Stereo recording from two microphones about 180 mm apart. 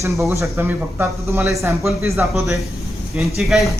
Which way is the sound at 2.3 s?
Centre (ahead or behind).